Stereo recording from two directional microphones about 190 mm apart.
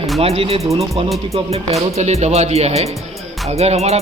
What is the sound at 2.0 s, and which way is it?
Speech, 35° right (ahead or behind).